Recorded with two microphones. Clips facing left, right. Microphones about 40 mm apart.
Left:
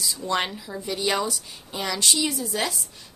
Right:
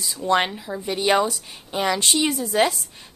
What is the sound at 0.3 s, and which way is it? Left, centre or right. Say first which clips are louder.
A woman's voice: right 7 dB; right.